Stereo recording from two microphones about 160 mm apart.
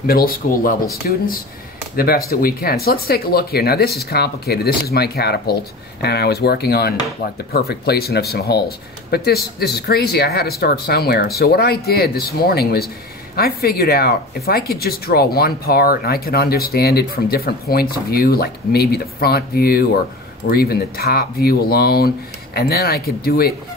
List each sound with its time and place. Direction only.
0.0 s speech: 70° left (ahead or behind)